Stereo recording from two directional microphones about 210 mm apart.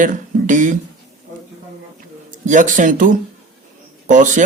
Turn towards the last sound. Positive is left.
turn(degrees=-35)  # may be behind; listen again after turning